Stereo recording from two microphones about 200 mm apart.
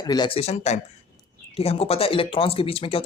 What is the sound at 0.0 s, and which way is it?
Speech, 20° left (ahead or behind).